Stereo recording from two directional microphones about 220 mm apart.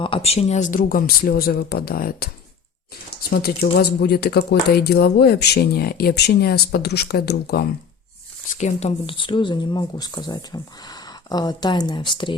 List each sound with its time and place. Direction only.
0.0 s speech: 25° left (ahead or behind); by 7.6 s 45° left (ahead or behind)
8.5 s speech: 30° left (ahead or behind)